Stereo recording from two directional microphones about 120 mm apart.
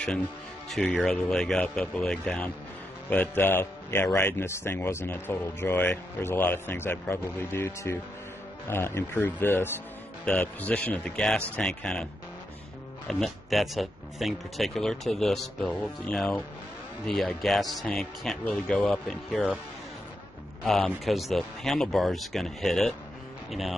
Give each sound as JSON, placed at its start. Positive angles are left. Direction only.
{"t": 0.7, "sound": "speech", "side_deg": 5}
{"t": 13.1, "sound": "speech", "side_deg": 0}
{"t": 18.9, "sound": "speech", "side_deg": 0}
{"t": 20.6, "sound": "speech", "side_deg": 5}